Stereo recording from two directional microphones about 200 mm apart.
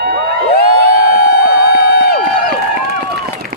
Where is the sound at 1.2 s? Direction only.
50° left (ahead or behind).